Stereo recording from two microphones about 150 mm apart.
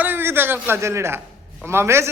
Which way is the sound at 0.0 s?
15° right (ahead or behind).